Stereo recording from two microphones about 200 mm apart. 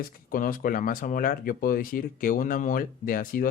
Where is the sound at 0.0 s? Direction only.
45° left (ahead or behind).